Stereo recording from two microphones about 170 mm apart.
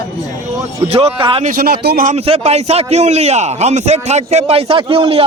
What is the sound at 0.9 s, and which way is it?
Speech, 35° right (ahead or behind).